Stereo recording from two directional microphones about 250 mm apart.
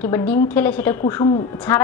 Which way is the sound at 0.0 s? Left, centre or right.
Centre.